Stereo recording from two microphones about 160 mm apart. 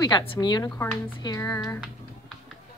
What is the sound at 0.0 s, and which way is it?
A woman's voice, 30° left (ahead or behind).